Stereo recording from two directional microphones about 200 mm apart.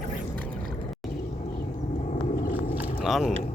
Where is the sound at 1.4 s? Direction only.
35° left (ahead or behind).